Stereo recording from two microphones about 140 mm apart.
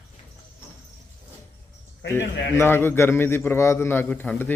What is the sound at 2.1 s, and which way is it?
A man's voice, 20° left (ahead or behind).